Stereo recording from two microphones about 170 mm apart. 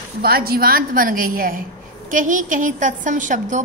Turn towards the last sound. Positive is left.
turn(degrees=-50)  # may be behind; listen again after turning